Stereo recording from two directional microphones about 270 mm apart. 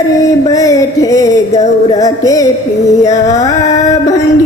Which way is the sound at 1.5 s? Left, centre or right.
Left.